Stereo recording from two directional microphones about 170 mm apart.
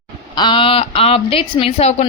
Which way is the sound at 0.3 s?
30° left (ahead or behind).